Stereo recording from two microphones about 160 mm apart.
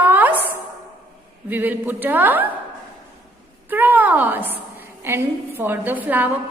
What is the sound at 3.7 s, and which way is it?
A woman's voice, 10° right (ahead or behind).